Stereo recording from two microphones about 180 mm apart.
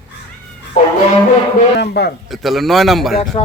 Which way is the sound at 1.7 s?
70° left (ahead or behind).